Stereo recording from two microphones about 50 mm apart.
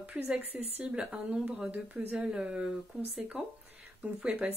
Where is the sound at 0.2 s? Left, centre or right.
Centre.